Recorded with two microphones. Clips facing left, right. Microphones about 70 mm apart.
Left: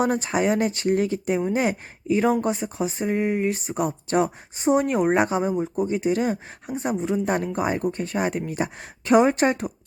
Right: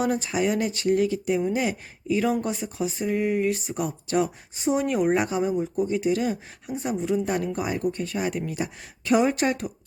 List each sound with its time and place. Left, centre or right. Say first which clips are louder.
0.0 s speech: left 2 dB; left